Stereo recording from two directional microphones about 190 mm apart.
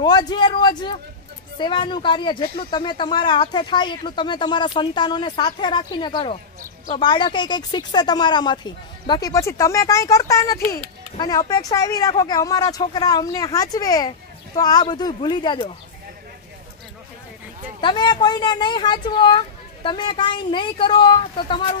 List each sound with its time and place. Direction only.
0.0 s speech: 20° left (ahead or behind)
17.7 s speech: 25° left (ahead or behind)